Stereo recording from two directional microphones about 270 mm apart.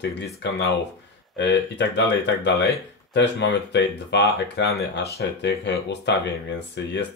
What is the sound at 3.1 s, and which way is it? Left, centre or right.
Speech, left.